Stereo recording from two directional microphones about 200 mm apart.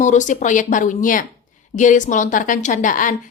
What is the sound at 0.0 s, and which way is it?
A woman's voice, 40° left (ahead or behind).